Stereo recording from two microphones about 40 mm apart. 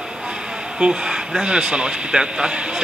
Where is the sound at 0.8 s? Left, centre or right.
Right.